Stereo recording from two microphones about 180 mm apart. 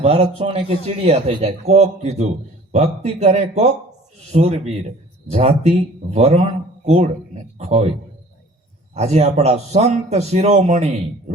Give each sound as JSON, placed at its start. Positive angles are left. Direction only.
{"t": 0.0, "sound": "a man's voice", "side_deg": -35}
{"t": 9.0, "sound": "a man's voice", "side_deg": -35}